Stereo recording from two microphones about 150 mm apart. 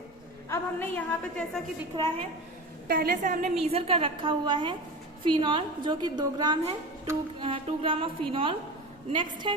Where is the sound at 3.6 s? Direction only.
40° right (ahead or behind).